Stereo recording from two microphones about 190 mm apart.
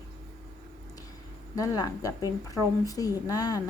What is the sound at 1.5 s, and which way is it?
Speech, 20° left (ahead or behind).